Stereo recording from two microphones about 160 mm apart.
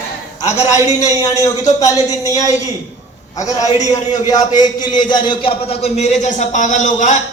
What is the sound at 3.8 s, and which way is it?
Speech, 45° left (ahead or behind).